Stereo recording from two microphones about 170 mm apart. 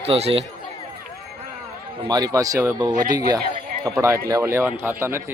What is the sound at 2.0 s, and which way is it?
A man's voice, 25° right (ahead or behind).